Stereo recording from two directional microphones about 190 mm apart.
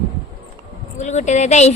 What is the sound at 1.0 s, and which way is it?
Speech, 40° left (ahead or behind).